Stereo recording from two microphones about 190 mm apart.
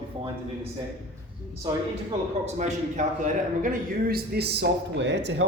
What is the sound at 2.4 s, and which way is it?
Speech, 40° right (ahead or behind).